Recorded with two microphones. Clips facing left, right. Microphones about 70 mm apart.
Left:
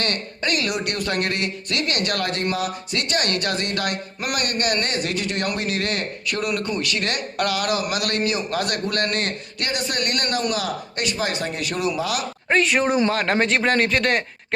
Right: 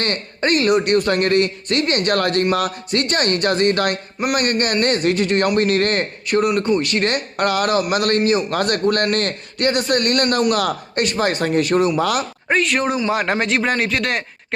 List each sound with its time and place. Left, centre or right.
0.0 s a man's voice: right
6.2 s a man's voice: right
12.5 s speech: centre